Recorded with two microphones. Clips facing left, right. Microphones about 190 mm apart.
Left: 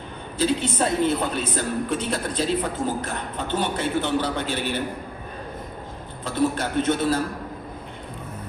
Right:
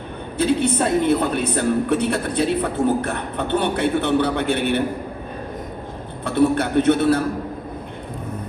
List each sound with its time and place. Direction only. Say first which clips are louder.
0.3 s a woman's voice: right 4 dB; 60° right (ahead or behind)
6.2 s a woman's voice: right 6 dB; 65° right (ahead or behind)